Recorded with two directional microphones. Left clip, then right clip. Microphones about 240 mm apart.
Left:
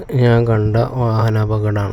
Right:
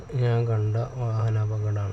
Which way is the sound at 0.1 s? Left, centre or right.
Left.